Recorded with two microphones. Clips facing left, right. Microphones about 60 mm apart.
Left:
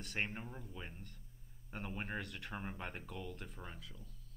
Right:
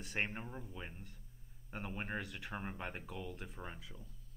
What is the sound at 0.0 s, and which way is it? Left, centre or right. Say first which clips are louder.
Speech: right 1 dB; centre.